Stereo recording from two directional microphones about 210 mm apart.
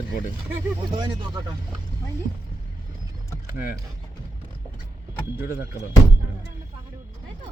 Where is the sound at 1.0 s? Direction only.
20° right (ahead or behind).